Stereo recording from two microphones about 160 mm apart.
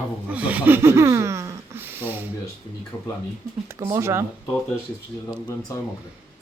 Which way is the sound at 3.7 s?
15° right (ahead or behind).